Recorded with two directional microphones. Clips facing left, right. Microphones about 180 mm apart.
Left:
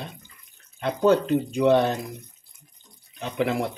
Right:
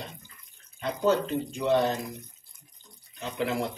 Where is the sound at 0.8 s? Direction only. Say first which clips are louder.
Left 5 dB; 60° left (ahead or behind).